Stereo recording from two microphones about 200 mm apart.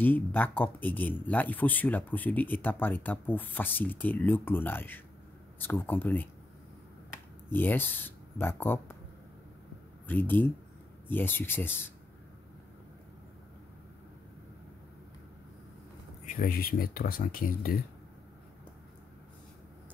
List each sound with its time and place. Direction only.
0.0 s speech: 10° left (ahead or behind)
7.5 s speech: 10° left (ahead or behind)
10.0 s speech: 10° left (ahead or behind)
16.3 s speech: 45° left (ahead or behind)